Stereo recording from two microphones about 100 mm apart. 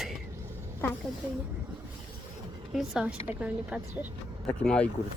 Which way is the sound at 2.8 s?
5° right (ahead or behind).